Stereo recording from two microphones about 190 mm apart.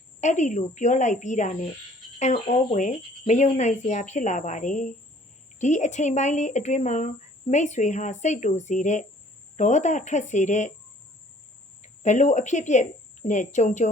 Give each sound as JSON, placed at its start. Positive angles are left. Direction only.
{"t": 0.2, "sound": "speech", "side_deg": 40}
{"t": 11.8, "sound": "speech", "side_deg": 40}